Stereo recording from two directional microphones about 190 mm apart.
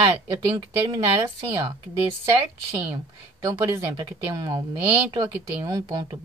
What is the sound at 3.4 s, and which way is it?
Speech, 15° right (ahead or behind).